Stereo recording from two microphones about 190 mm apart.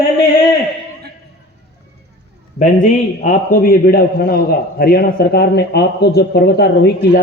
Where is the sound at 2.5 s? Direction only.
40° left (ahead or behind).